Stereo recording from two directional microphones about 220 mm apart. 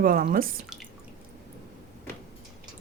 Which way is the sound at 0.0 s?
40° right (ahead or behind).